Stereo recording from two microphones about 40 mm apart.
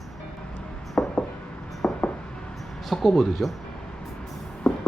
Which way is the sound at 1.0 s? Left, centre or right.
Left.